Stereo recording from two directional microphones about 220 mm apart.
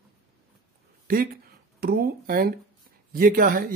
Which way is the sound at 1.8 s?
40° right (ahead or behind).